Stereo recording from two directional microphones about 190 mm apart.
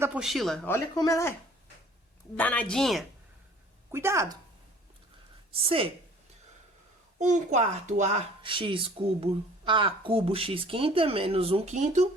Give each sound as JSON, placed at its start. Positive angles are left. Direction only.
{"t": 0.0, "sound": "a woman's voice", "side_deg": -5}
{"t": 0.7, "sound": "a woman's voice", "side_deg": 15}
{"t": 3.9, "sound": "a woman's voice", "side_deg": -15}
{"t": 5.5, "sound": "a woman's voice", "side_deg": -30}
{"t": 7.2, "sound": "speech", "side_deg": -40}